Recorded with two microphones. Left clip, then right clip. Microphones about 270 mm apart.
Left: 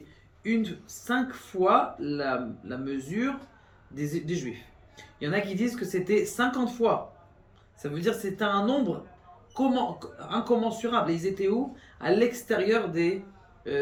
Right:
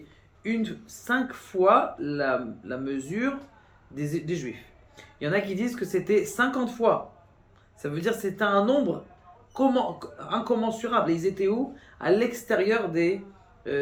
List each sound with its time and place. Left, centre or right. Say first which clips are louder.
0.4 s a man's voice: left 1 dB; centre